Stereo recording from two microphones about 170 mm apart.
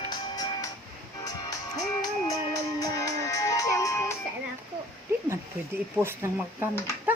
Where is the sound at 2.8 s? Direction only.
20° left (ahead or behind).